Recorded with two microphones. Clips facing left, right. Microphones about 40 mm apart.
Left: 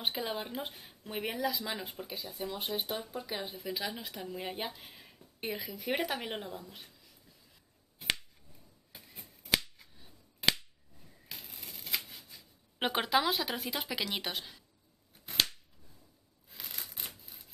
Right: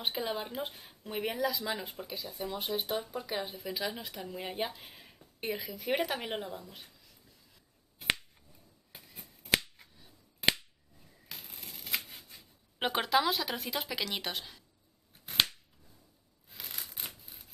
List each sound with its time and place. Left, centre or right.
0.0 s speech: centre
9.2 s finger snapping: right
11.3 s a sound: centre
11.7 s scissors: right
12.7 s speech: centre
16.4 s a sound: centre